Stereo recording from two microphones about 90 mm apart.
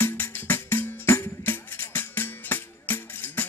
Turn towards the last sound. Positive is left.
turn(degrees=20)  # may be behind; listen again after turning